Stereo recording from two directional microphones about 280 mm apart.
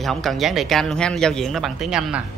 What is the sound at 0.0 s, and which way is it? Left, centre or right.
Speech, centre.